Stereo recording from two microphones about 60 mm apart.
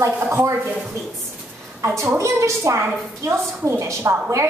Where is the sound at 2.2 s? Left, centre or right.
Right.